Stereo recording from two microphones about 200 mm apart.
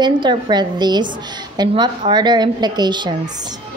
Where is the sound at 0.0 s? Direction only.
20° right (ahead or behind).